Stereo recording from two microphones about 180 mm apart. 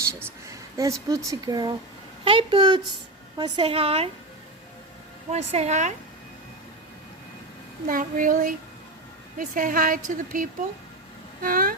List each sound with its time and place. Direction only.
0.1 s a sound: 15° right (ahead or behind)
1.0 s a woman's voice: 20° right (ahead or behind); by 4.1 s 35° right (ahead or behind)
5.3 s a woman's voice: 35° right (ahead or behind)
7.9 s a woman's voice: 50° right (ahead or behind)